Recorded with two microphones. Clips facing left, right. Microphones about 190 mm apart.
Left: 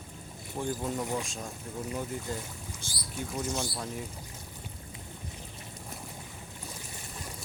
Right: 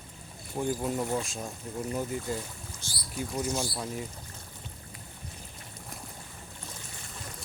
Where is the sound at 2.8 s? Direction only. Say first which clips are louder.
Even; 50° left (ahead or behind).